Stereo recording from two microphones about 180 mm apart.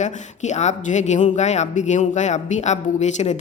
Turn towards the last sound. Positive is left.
turn(degrees=40)  # may be behind; listen again after turning